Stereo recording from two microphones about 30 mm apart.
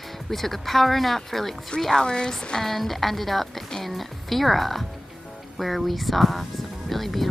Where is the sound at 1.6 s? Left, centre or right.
Left.